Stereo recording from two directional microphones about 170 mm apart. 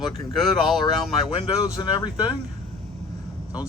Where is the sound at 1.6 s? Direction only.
25° left (ahead or behind).